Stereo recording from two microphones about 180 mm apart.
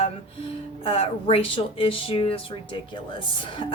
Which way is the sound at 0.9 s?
30° left (ahead or behind).